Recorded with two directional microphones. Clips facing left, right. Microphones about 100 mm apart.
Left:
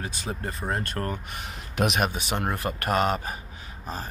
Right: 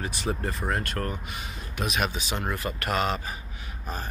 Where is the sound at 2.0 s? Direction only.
50° left (ahead or behind).